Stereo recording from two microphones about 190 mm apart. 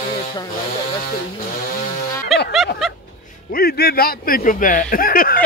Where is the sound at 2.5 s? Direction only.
Centre (ahead or behind).